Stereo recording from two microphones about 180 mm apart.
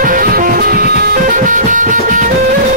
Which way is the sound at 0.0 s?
50° right (ahead or behind).